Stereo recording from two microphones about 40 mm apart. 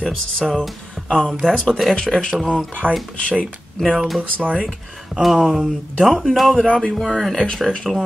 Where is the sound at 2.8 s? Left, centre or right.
Right.